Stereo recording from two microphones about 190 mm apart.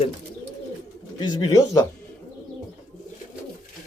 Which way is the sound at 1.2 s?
20° left (ahead or behind).